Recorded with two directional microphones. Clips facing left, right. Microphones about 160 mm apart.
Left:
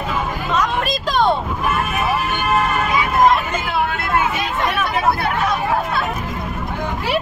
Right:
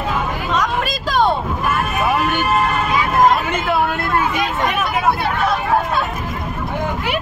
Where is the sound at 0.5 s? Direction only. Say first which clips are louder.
Left 1 dB; centre (ahead or behind).